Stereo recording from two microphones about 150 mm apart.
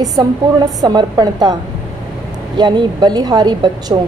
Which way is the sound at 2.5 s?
30° right (ahead or behind).